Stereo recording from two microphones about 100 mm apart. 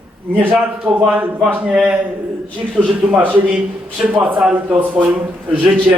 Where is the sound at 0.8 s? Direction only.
15° right (ahead or behind).